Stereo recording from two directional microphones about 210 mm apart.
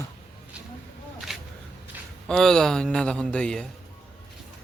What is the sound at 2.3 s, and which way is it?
A man's voice, centre (ahead or behind).